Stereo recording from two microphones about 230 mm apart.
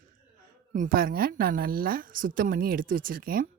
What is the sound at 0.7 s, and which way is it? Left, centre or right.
Speech, right.